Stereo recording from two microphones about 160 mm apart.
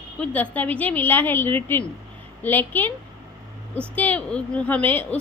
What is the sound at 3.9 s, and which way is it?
A woman's voice, 10° left (ahead or behind).